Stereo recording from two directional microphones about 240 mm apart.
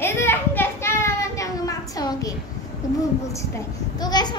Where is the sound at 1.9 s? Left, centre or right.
Centre.